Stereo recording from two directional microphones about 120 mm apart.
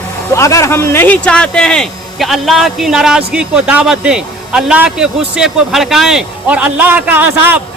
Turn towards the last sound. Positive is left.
turn(degrees=-15)  # may be behind; listen again after turning